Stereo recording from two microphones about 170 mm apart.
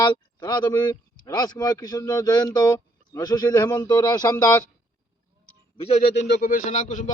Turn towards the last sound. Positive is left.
turn(degrees=45)  # may be behind; listen again after turning